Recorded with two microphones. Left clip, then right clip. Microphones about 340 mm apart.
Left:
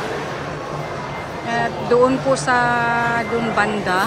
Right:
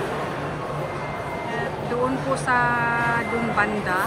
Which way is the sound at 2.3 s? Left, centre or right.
Centre.